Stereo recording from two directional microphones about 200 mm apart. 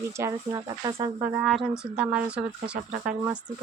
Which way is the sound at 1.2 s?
Centre (ahead or behind).